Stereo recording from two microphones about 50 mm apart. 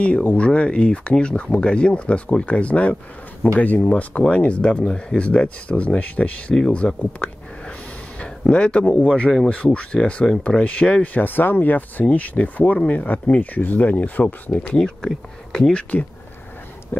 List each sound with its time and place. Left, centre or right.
0.0 s speech: left
8.2 s a sound: left
8.9 s speech: centre
14.8 s speech: centre
15.7 s speech: left